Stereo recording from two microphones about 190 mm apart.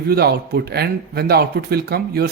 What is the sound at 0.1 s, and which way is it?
Speech, 55° right (ahead or behind).